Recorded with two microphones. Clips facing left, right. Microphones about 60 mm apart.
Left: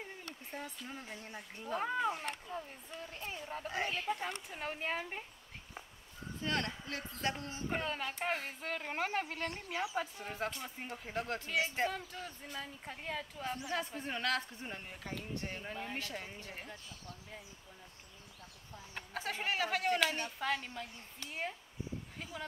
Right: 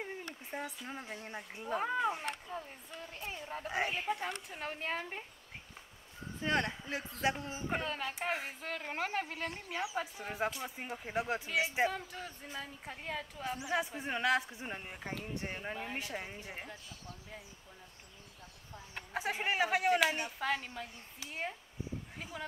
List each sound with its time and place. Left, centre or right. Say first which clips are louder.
0.0 s a sound: right 4 dB; right
0.8 s speech: right 3 dB; centre
4.1 s speech: right 1 dB; centre
6.4 s speech: right 4 dB; right
8.5 s speech: even; centre
19.1 s speech: right 3 dB; centre